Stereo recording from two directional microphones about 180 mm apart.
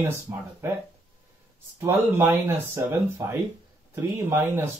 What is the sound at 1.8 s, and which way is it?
Speech, 15° right (ahead or behind).